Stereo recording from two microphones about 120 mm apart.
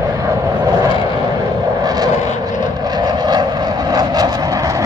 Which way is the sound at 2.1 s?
90° left.